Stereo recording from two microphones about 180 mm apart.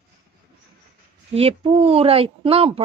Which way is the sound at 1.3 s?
35° right (ahead or behind).